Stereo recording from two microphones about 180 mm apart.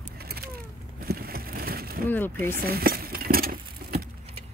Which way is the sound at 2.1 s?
10° left (ahead or behind).